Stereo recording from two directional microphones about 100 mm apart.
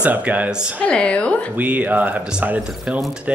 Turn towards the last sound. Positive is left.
turn(degrees=-15)  # may be behind; listen again after turning